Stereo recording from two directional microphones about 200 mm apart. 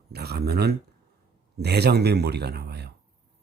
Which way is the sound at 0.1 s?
55° right (ahead or behind).